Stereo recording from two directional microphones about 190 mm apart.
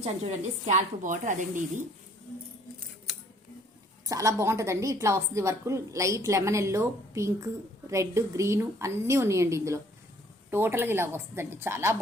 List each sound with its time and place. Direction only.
0.0 s a woman's voice: 35° right (ahead or behind)
4.1 s a woman's voice: 15° right (ahead or behind)